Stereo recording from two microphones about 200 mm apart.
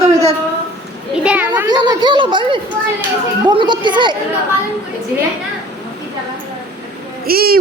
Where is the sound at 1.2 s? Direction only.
5° right (ahead or behind).